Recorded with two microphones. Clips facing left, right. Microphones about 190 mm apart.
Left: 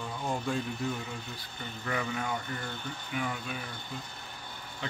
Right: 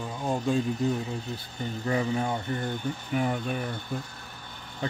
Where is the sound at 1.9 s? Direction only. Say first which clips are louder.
Right 6 dB; 30° right (ahead or behind).